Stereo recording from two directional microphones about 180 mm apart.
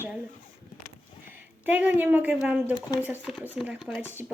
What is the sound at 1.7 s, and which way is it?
Speech, 10° right (ahead or behind).